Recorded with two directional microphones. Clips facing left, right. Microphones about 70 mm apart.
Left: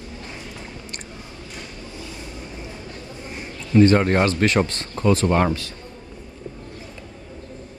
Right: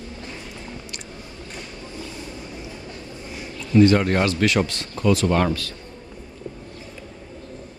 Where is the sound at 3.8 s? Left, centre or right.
Left.